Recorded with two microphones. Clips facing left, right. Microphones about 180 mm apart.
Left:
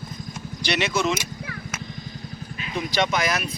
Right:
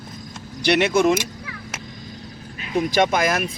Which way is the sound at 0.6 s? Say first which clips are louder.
Right 7 dB; 55° right (ahead or behind).